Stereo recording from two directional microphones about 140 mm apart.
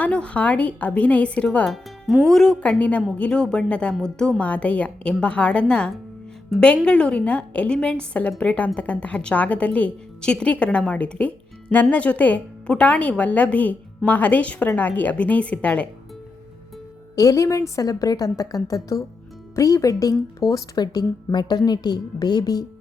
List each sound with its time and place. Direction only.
0.0 s a woman's voice: 10° left (ahead or behind)
17.2 s a woman's voice: 25° left (ahead or behind)